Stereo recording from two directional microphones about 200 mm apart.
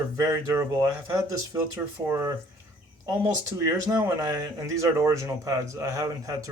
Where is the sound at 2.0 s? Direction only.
15° right (ahead or behind).